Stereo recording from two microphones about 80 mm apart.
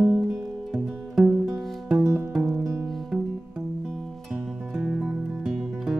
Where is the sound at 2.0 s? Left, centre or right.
Right.